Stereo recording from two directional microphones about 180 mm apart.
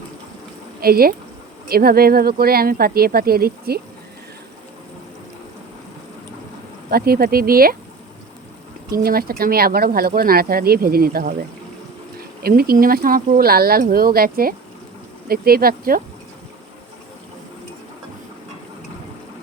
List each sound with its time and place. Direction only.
0.8 s speech: 55° right (ahead or behind)
6.9 s speech: 60° right (ahead or behind)
8.9 s speech: 55° right (ahead or behind)